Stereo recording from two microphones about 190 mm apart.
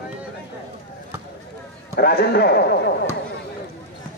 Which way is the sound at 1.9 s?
55° left (ahead or behind).